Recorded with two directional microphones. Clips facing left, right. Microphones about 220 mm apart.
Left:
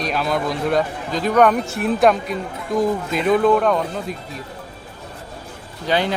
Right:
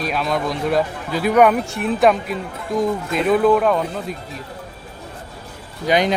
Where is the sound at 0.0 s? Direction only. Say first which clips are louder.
Even; centre (ahead or behind).